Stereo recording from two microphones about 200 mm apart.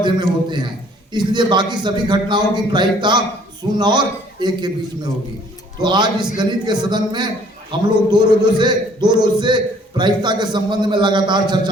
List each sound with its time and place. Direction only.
0.0 s a man's voice: 20° right (ahead or behind)
5.8 s a man's voice: 20° right (ahead or behind)